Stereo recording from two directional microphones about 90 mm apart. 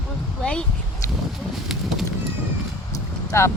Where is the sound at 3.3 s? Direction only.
30° left (ahead or behind).